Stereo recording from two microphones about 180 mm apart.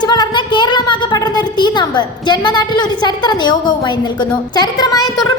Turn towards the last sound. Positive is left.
turn(degrees=25)  # may be behind; listen again after turning